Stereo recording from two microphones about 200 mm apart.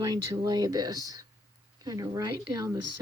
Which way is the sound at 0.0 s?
20° right (ahead or behind).